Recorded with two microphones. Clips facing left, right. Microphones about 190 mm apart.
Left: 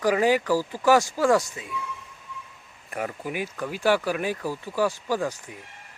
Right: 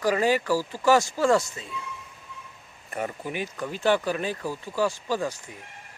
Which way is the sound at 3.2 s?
10° left (ahead or behind).